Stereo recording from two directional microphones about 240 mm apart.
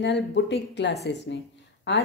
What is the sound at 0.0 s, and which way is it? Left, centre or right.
Speech, left.